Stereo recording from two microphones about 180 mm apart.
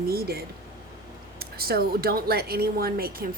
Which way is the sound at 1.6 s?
55° right (ahead or behind).